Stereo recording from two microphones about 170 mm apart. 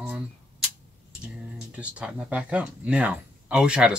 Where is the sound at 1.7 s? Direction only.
5° right (ahead or behind).